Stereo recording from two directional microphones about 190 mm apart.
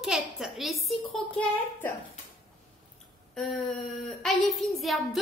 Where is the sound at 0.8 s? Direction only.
5° left (ahead or behind).